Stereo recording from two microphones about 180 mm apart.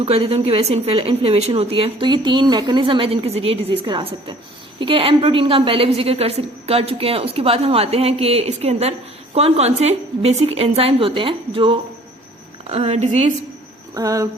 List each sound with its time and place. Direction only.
0.0 s a woman's voice: 35° right (ahead or behind)
13.9 s speech: 20° right (ahead or behind)